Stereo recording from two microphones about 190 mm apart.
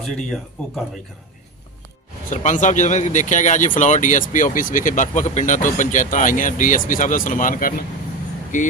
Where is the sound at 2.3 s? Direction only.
40° left (ahead or behind).